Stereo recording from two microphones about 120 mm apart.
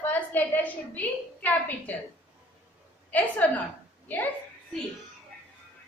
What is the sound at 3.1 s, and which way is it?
Speech, 10° left (ahead or behind).